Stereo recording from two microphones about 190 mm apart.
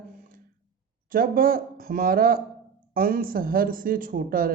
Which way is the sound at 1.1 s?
50° right (ahead or behind).